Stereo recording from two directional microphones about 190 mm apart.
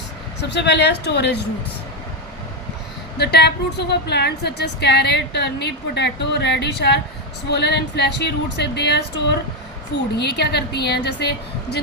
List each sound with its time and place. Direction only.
0.4 s a woman's voice: 65° left (ahead or behind)
3.2 s a woman's voice: 60° left (ahead or behind)